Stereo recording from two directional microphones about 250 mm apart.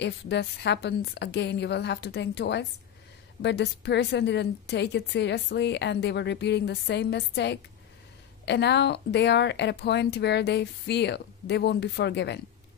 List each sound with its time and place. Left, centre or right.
0.0 s a woman's voice: left